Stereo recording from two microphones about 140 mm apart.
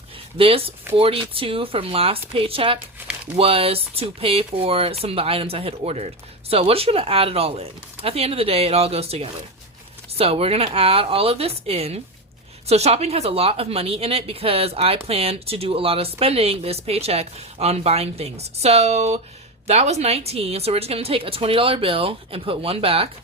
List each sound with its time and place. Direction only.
0.3 s speech: 40° right (ahead or behind)